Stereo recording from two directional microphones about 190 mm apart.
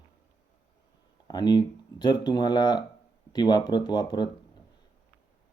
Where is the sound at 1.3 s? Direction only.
20° left (ahead or behind).